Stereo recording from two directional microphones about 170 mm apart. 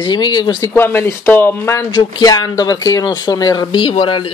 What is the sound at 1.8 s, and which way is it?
Speech, 25° left (ahead or behind).